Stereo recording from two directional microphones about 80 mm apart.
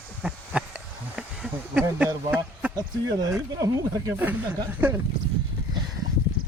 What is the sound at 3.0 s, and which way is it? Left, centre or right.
Speech, right.